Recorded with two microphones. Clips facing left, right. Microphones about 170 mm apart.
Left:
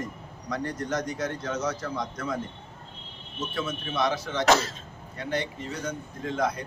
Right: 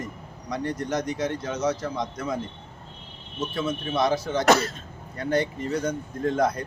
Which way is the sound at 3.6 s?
35° right (ahead or behind).